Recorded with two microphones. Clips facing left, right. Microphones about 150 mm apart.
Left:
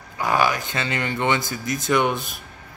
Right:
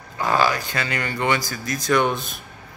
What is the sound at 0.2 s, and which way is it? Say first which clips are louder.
Speech: right 1 dB; 15° left (ahead or behind).